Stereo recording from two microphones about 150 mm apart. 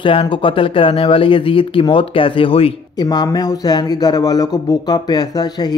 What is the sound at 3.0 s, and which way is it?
Speech, 25° left (ahead or behind).